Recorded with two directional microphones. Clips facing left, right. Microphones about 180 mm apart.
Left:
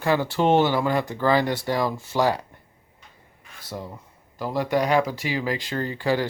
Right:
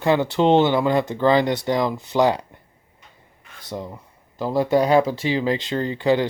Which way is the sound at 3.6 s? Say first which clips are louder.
Right 4 dB; 20° right (ahead or behind).